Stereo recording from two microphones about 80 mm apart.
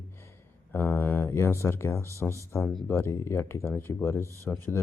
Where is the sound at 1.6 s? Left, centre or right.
Left.